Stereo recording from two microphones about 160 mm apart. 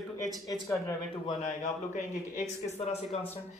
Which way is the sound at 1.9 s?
50° left (ahead or behind).